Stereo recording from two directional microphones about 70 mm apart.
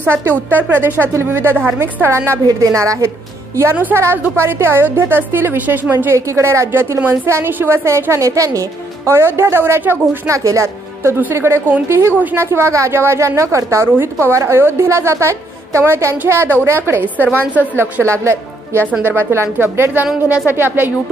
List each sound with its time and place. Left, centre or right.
0.5 s a woman's voice: right
2.4 s a woman's voice: right
3.9 s a woman's voice: right
6.1 s a woman's voice: right
6.7 s a woman's voice: right
9.1 s a woman's voice: right
10.2 s speech: right
11.3 s a woman's voice: right
17.2 s a woman's voice: left
18.0 s a woman's voice: right